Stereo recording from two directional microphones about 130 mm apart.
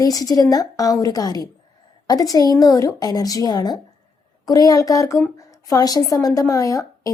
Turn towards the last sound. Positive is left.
turn(degrees=25)  # may be behind; listen again after turning